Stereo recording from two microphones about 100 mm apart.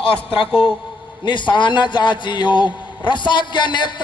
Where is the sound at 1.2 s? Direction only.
50° left (ahead or behind).